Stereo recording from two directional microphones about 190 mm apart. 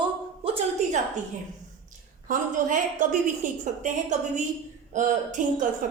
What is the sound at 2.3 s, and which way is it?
Speech, 45° right (ahead or behind).